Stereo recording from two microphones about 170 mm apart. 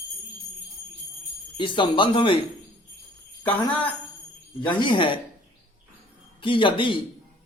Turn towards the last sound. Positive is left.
turn(degrees=30)  # may be behind; listen again after turning